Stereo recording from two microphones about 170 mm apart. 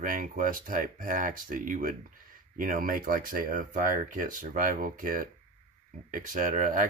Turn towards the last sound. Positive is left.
turn(degrees=-50)  # may be behind; listen again after turning